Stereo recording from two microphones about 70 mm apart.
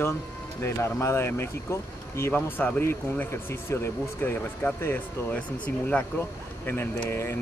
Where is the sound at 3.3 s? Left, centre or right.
Left.